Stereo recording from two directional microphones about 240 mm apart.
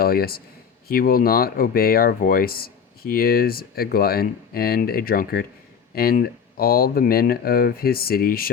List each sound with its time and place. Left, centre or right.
0.0 s speech: left